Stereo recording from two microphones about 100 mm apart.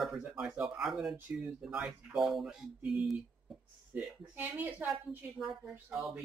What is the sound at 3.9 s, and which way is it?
Speech, 20° right (ahead or behind).